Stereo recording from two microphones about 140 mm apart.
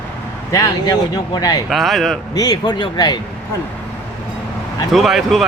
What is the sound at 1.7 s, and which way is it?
Speech, centre (ahead or behind).